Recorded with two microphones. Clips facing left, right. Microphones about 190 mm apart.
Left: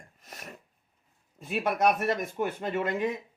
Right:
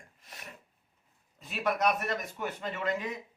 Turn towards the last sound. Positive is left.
turn(degrees=50)  # may be behind; listen again after turning